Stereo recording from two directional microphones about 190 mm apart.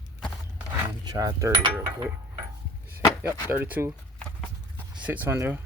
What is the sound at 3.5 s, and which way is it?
Speech, 10° right (ahead or behind).